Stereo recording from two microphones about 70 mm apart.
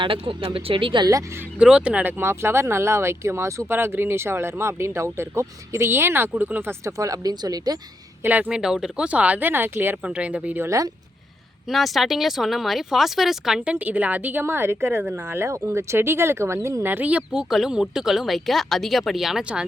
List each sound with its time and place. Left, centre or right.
1.0 s speech: right
1.5 s speech: centre
2.1 s speech: right
6.8 s speech: right
8.2 s speech: right
8.4 s speech: centre
9.0 s speech: centre
10.0 s speech: centre
10.6 s speech: right
11.7 s speech: centre
13.7 s speech: right
17.1 s speech: centre
17.5 s speech: centre